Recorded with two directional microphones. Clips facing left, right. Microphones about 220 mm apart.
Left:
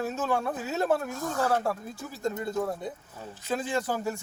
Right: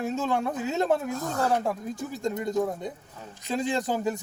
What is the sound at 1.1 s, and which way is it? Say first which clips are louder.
Speech: right 2 dB; 40° right (ahead or behind).